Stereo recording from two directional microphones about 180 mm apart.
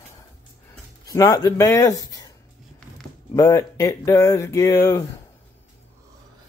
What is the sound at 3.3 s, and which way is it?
Speech, 15° left (ahead or behind).